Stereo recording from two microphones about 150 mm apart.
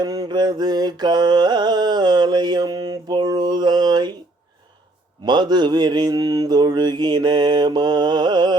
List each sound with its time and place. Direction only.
0.0 s mantra: 25° right (ahead or behind)
5.2 s mantra: 30° right (ahead or behind)